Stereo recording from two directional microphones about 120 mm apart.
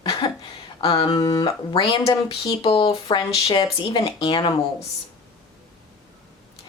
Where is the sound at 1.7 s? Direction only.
40° left (ahead or behind).